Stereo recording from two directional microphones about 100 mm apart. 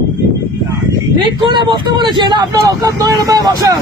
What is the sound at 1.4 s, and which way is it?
Speech, 55° right (ahead or behind).